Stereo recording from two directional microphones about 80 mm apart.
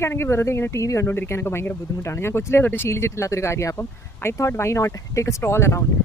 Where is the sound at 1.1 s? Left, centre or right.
Left.